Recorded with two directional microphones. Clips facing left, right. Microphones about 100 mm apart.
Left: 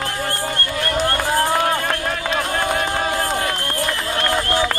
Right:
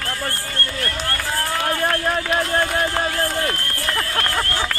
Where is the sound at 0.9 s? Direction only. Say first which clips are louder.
Left 6 dB; 15° left (ahead or behind).